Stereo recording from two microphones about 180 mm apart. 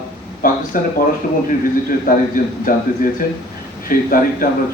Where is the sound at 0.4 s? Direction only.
50° left (ahead or behind).